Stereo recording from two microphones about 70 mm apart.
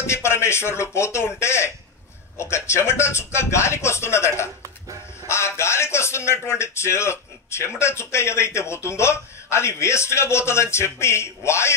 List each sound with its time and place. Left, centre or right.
0.0 s speech: left